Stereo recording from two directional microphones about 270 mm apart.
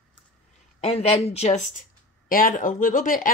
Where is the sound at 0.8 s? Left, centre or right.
Left.